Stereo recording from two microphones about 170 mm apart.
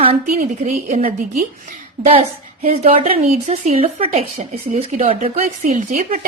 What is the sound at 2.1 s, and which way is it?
A woman's voice, 35° right (ahead or behind).